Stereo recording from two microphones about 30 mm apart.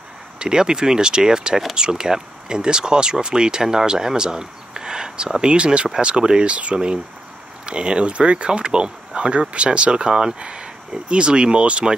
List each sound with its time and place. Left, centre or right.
0.4 s speech: right
6.5 s speech: right
7.6 s speech: right